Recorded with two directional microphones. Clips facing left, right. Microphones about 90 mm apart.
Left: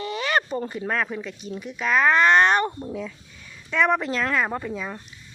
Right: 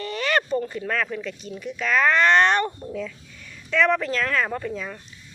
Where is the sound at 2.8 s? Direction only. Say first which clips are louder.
Right 1 dB; 20° left (ahead or behind).